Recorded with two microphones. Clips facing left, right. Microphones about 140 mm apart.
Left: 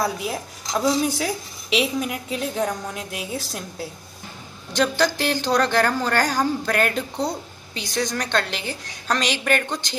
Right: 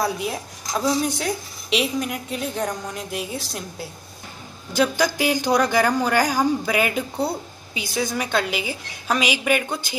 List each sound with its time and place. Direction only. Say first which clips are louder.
0.0 s speech: even; centre (ahead or behind)